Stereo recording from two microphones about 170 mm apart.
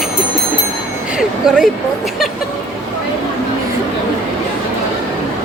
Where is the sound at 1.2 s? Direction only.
5° right (ahead or behind).